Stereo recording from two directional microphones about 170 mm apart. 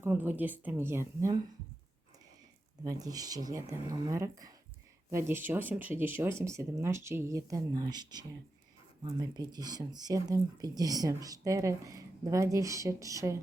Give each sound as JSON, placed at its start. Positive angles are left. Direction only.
{"t": 0.0, "sound": "speech", "side_deg": -10}
{"t": 2.8, "sound": "speech", "side_deg": -20}